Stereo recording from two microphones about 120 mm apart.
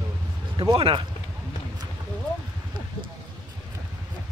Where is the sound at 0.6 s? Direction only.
45° right (ahead or behind).